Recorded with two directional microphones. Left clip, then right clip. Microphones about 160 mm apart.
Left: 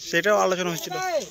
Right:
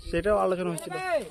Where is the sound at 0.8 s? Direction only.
40° left (ahead or behind).